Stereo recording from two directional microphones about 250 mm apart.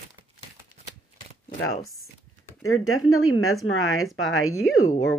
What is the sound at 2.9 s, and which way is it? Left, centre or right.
Speech, left.